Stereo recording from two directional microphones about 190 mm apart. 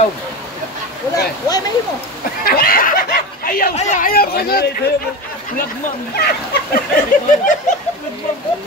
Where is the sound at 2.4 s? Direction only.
50° left (ahead or behind).